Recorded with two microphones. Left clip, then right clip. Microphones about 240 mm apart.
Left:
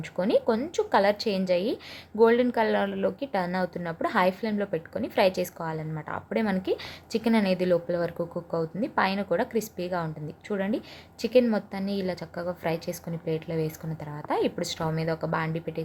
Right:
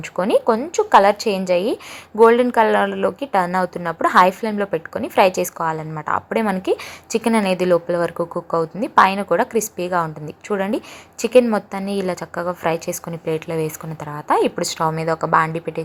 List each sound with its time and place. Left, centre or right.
0.2 s a woman's voice: centre